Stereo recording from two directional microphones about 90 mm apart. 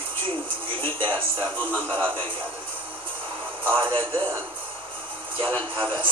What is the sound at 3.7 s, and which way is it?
Speech, 90° right.